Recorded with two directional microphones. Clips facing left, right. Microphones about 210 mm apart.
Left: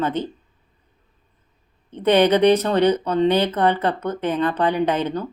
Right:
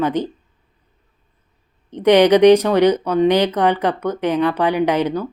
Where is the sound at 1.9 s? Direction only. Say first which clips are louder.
Right 4 dB; 15° right (ahead or behind).